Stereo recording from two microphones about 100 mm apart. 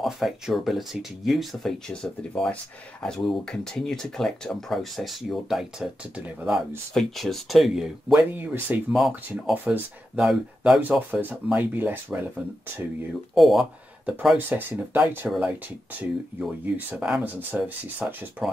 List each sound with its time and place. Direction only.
0.0 s speech: centre (ahead or behind)
6.9 s speech: 5° left (ahead or behind)
8.4 s speech: 15° right (ahead or behind)
10.8 s speech: 20° right (ahead or behind)
13.3 s speech: centre (ahead or behind)
14.3 s speech: 20° right (ahead or behind)
18.4 s speech: centre (ahead or behind)